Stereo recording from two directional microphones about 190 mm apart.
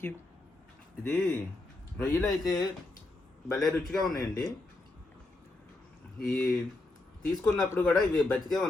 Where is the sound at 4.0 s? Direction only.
20° left (ahead or behind).